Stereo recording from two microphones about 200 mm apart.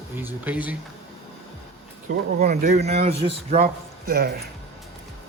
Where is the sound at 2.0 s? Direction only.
45° right (ahead or behind).